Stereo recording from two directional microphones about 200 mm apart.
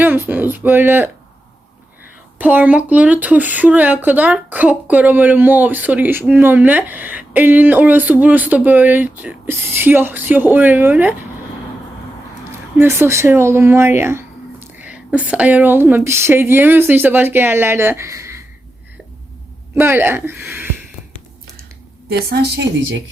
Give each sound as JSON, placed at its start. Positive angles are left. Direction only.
{"t": 0.0, "sound": "speech", "side_deg": -10}
{"t": 2.4, "sound": "speech", "side_deg": -10}
{"t": 12.5, "sound": "speech", "side_deg": -10}
{"t": 19.7, "sound": "speech", "side_deg": -10}
{"t": 22.3, "sound": "a woman's voice", "side_deg": -55}